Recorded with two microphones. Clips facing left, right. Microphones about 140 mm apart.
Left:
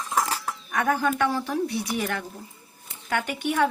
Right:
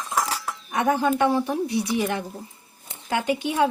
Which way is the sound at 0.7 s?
20° right (ahead or behind).